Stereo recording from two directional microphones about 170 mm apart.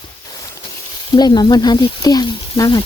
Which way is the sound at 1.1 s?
25° left (ahead or behind).